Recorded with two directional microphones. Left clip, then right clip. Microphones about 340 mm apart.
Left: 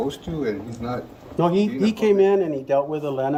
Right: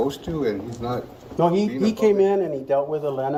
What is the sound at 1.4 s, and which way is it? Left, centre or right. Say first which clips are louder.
Speech: even; left.